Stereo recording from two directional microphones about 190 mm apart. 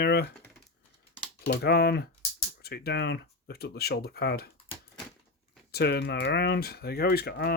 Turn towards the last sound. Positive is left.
turn(degrees=55)  # may be behind; listen again after turning